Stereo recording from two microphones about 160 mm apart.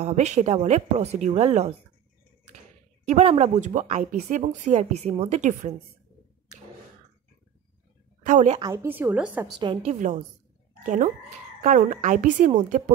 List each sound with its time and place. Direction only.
0.0 s speech: 45° right (ahead or behind)
3.1 s speech: 45° right (ahead or behind)
4.4 s speech: 45° right (ahead or behind)
8.3 s a woman's voice: 50° right (ahead or behind)
8.5 s a woman's voice: 25° right (ahead or behind)
8.8 s a woman's voice: 10° right (ahead or behind)
9.6 s a woman's voice: 35° right (ahead or behind)
11.6 s speech: 60° right (ahead or behind)